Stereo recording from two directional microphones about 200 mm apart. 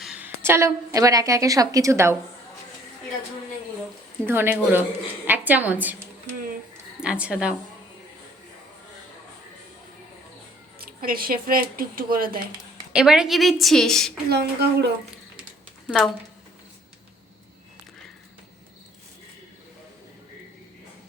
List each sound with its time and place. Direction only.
0.0 s a woman's voice: 5° right (ahead or behind)
4.3 s a woman's voice: 10° right (ahead or behind)
10.8 s speech: 45° right (ahead or behind)
12.9 s a woman's voice: 5° right (ahead or behind)
14.3 s speech: 55° right (ahead or behind)